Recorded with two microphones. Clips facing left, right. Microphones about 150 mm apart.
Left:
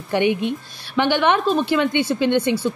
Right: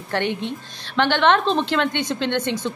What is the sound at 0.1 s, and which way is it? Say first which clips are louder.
A woman's voice: left 5 dB; 10° left (ahead or behind).